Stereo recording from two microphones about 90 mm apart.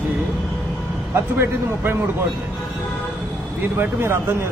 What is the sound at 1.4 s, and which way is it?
Speech, 25° right (ahead or behind).